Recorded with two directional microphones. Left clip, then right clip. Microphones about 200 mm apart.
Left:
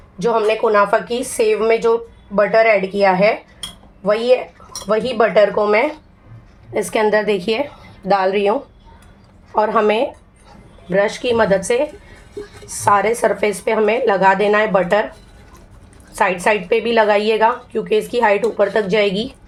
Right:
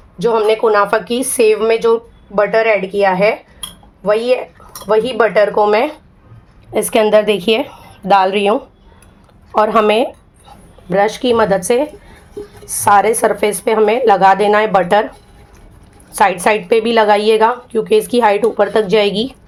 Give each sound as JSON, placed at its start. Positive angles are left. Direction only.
{"t": 0.2, "sound": "a woman's voice", "side_deg": -55}
{"t": 9.6, "sound": "a woman's voice", "side_deg": -45}
{"t": 16.1, "sound": "a woman's voice", "side_deg": -50}